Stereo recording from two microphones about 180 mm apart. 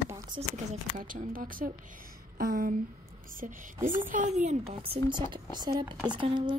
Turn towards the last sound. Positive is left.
turn(degrees=-25)  # may be behind; listen again after turning